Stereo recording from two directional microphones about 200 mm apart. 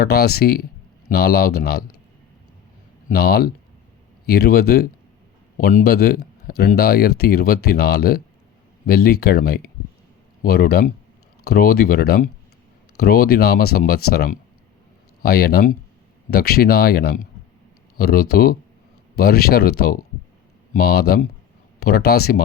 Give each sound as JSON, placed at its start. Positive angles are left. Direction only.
{"t": 0.0, "sound": "a man's voice", "side_deg": 50}
{"t": 3.1, "sound": "a man's voice", "side_deg": 50}